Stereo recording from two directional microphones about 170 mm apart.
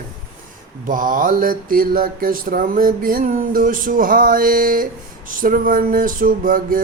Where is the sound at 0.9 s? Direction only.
50° right (ahead or behind).